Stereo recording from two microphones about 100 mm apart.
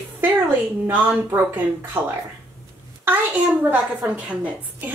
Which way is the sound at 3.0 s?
15° right (ahead or behind).